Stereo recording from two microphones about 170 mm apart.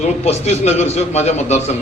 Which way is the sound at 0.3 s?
40° left (ahead or behind).